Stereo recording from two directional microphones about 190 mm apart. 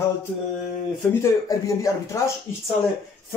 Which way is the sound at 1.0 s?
15° left (ahead or behind).